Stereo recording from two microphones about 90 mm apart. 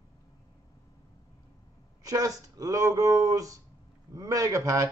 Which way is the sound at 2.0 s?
40° right (ahead or behind).